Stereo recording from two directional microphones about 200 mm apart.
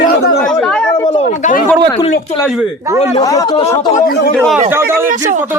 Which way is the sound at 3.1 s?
20° left (ahead or behind).